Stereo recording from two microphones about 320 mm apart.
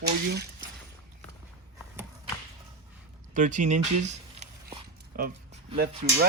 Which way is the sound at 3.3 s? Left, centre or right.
Right.